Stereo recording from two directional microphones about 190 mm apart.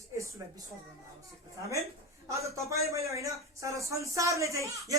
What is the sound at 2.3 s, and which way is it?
Speech, 15° right (ahead or behind).